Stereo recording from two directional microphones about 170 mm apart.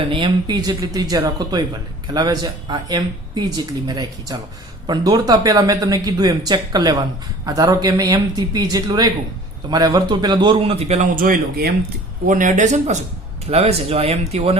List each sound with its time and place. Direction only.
0.1 s speech: 25° right (ahead or behind)
11.2 s speech: 60° right (ahead or behind)
12.3 s speech: 50° right (ahead or behind)